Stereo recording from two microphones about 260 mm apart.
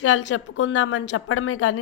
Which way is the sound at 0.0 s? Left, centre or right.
Left.